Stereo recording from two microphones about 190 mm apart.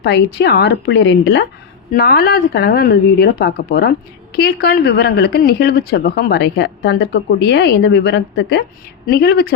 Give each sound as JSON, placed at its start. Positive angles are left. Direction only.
{"t": 0.0, "sound": "speech", "side_deg": 60}
{"t": 1.9, "sound": "speech", "side_deg": 55}
{"t": 9.0, "sound": "speech", "side_deg": 60}